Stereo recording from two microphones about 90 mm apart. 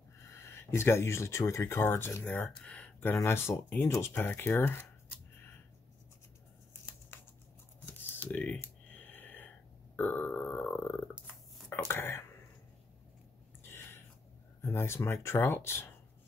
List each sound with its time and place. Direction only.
0.2 s speech: 30° left (ahead or behind)
7.1 s a sound: 25° left (ahead or behind)
7.8 s computer keyboard: 20° left (ahead or behind)
11.9 s speech: 30° left (ahead or behind)
13.6 s a sound: 25° left (ahead or behind)
14.6 s speech: 30° left (ahead or behind)